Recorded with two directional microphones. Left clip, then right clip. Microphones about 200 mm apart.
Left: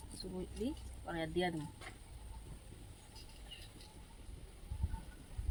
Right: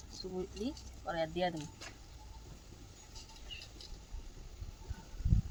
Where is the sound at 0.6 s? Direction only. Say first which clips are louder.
Right 2 dB; 15° right (ahead or behind).